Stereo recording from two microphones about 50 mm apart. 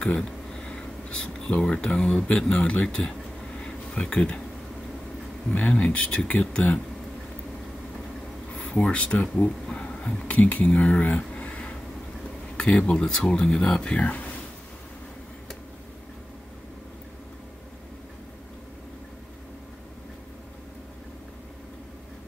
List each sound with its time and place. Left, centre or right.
0.0 s speech: centre
3.5 s a sound: left
5.5 s speech: left
8.5 s speech: left
9.4 s a sound: centre
10.2 s speech: left
13.9 s speech: left